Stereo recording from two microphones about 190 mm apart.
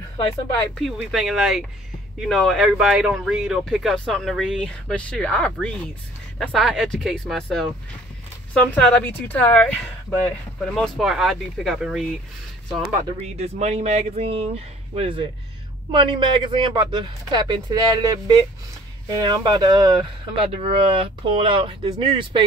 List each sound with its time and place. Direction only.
0.7 s speech: centre (ahead or behind)
13.2 s speech: 35° right (ahead or behind)
20.5 s speech: 30° right (ahead or behind)